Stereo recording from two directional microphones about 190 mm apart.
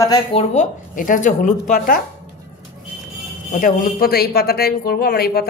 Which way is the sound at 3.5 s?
45° left (ahead or behind).